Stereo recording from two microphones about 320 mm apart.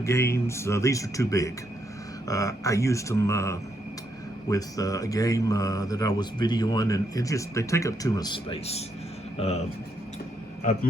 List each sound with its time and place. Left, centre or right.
0.0 s speech: centre